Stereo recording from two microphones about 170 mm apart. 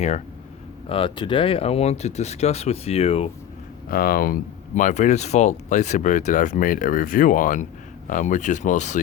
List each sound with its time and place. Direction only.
0.9 s speech: 30° left (ahead or behind)
3.8 s speech: 60° left (ahead or behind); by 9.0 s 45° left (ahead or behind)